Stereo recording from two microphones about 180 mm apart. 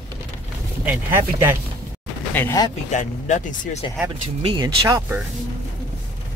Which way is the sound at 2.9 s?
45° left (ahead or behind).